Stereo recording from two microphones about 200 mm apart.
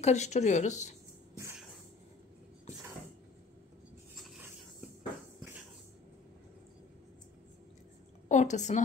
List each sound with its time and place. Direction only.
0.0 s speech: 35° left (ahead or behind)
8.3 s a woman's voice: 35° left (ahead or behind)